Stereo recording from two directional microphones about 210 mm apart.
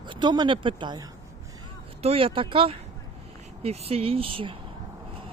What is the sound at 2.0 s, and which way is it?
Speech, 25° right (ahead or behind).